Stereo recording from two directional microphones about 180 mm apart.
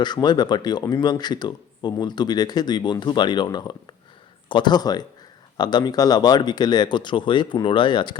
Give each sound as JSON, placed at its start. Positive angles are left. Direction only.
{"t": 0.0, "sound": "speech", "side_deg": 25}